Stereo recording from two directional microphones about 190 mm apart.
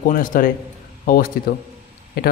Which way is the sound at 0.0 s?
45° left (ahead or behind).